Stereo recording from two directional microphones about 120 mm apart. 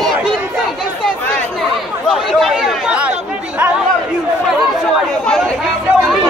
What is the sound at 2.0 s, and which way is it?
Chatter, centre (ahead or behind).